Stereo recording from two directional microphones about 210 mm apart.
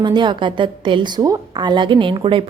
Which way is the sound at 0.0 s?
20° right (ahead or behind).